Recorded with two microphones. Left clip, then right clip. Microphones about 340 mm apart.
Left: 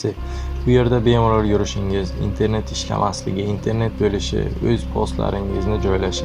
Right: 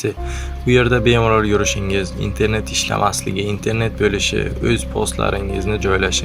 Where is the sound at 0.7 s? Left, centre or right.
Right.